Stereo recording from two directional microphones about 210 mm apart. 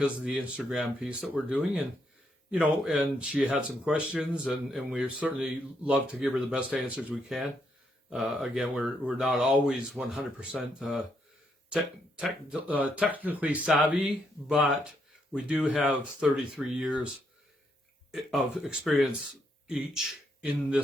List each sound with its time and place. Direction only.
0.0 s speech: 5° right (ahead or behind)
18.1 s a man's voice: centre (ahead or behind)